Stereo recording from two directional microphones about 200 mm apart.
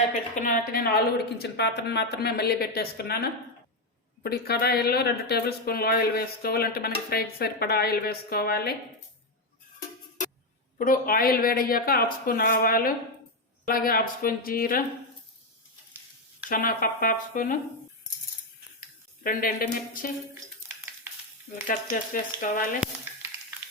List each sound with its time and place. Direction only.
0.3 s speech: 40° left (ahead or behind)
10.8 s speech: 45° left (ahead or behind)
16.5 s speech: 45° left (ahead or behind)
19.2 s speech: 45° left (ahead or behind)
21.7 s speech: 45° left (ahead or behind)